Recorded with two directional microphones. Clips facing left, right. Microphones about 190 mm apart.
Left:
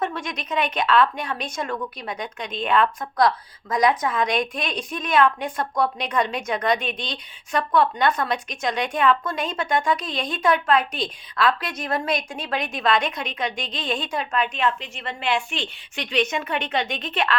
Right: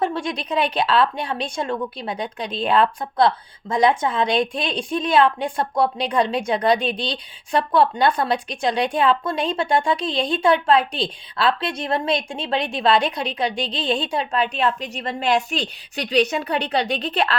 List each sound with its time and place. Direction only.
0.0 s speech: 30° right (ahead or behind)